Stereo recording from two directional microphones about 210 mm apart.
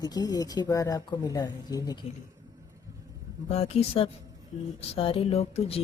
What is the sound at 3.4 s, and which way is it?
Speech, 30° left (ahead or behind).